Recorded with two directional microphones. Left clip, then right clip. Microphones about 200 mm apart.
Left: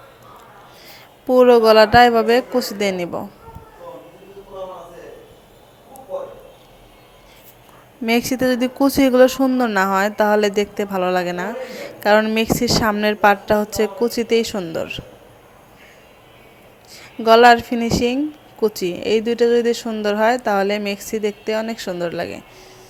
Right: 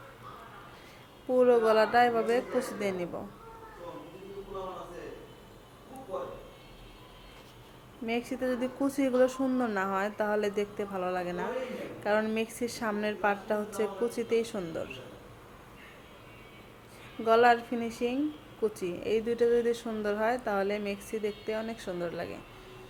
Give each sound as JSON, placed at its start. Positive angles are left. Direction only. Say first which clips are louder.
{"t": 1.3, "sound": "speech", "louder": "left 13 dB", "side_deg": 40}
{"t": 8.0, "sound": "speech", "louder": "left 14 dB", "side_deg": 45}
{"t": 17.2, "sound": "speech", "louder": "left 13 dB", "side_deg": 45}